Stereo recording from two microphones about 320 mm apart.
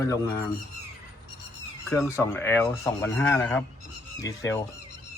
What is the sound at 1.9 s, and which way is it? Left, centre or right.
Speech, centre.